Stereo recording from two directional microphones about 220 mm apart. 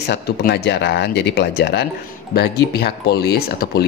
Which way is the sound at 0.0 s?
50° left (ahead or behind).